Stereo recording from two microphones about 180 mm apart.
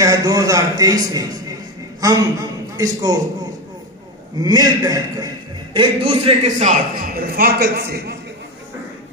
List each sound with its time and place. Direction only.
0.0 s a man's voice: 20° right (ahead or behind)
4.4 s a man's voice: 20° right (ahead or behind); by 8.2 s 65° right (ahead or behind)